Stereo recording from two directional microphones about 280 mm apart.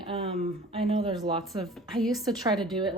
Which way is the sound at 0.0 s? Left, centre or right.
Centre.